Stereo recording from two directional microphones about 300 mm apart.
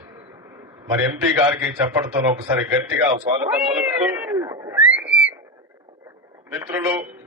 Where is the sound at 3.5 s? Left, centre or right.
Centre.